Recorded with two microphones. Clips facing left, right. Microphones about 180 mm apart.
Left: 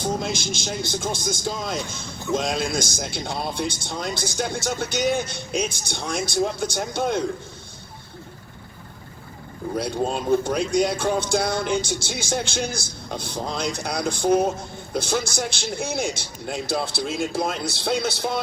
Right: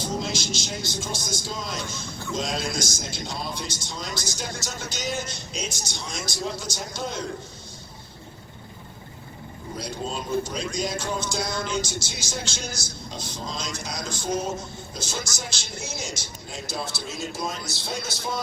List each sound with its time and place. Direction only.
0.0 s a man's voice: 55° left (ahead or behind)
9.7 s a man's voice: 60° left (ahead or behind)